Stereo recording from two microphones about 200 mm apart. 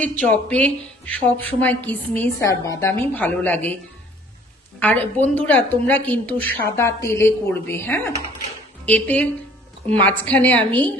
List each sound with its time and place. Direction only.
0.0 s speech: 5° left (ahead or behind)
4.8 s speech: 10° left (ahead or behind)